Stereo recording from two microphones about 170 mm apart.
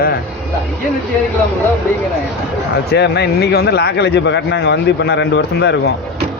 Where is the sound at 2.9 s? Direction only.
70° left (ahead or behind).